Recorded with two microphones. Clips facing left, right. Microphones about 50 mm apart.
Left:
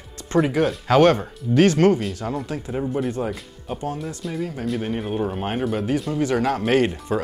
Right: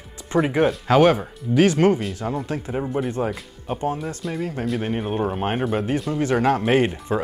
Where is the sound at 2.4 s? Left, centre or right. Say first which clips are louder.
Right 2 dB; right.